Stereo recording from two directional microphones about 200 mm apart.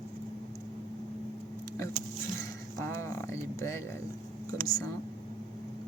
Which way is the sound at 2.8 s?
15° left (ahead or behind).